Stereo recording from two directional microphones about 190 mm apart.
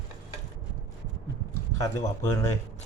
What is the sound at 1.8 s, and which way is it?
Speech, 15° left (ahead or behind).